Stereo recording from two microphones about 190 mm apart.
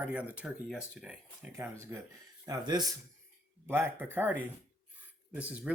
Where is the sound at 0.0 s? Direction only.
10° right (ahead or behind).